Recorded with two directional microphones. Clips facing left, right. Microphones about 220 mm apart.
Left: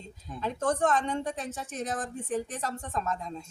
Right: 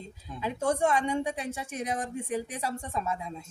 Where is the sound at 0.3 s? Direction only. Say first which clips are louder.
Even; 10° right (ahead or behind).